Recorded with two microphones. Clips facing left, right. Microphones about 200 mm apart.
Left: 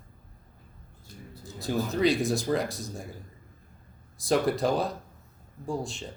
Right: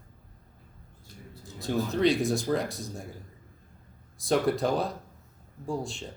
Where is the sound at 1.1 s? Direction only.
40° left (ahead or behind).